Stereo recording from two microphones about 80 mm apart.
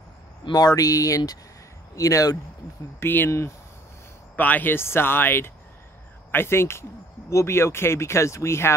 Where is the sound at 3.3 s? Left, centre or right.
Left.